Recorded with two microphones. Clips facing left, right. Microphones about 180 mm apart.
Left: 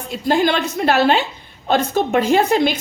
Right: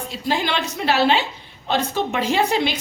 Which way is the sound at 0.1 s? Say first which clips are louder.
Left 7 dB; 50° left (ahead or behind).